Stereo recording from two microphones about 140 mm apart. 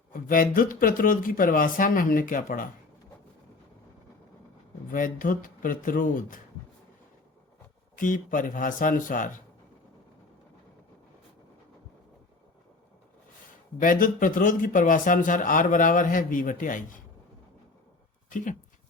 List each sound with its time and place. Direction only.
0.1 s speech: 80° left
4.9 s a man's voice: 75° left (ahead or behind)
7.9 s a man's voice: 75° left (ahead or behind)
13.7 s a man's voice: 75° left (ahead or behind)
18.3 s speech: 65° left (ahead or behind)